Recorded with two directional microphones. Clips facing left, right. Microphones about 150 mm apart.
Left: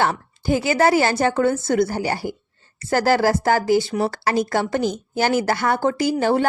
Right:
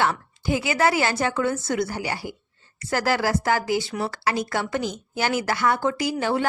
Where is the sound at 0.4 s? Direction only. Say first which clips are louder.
Left 4 dB; 40° left (ahead or behind).